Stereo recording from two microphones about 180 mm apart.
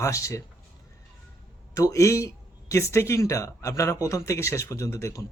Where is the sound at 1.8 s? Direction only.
15° left (ahead or behind).